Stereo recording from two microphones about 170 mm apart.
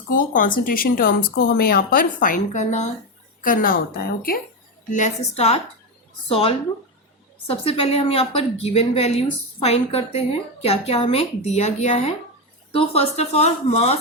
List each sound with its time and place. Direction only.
0.1 s speech: 55° left (ahead or behind)
3.4 s speech: 55° left (ahead or behind)
4.9 s a woman's voice: 45° left (ahead or behind)